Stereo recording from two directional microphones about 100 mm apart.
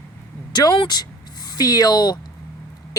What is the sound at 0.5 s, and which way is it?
Speech, 45° left (ahead or behind).